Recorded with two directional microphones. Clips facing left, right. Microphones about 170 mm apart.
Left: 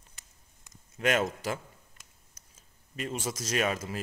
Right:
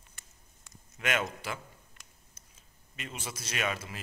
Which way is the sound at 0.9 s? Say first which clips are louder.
Left 5 dB; 35° left (ahead or behind).